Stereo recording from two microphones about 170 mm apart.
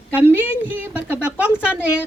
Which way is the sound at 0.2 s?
10° right (ahead or behind).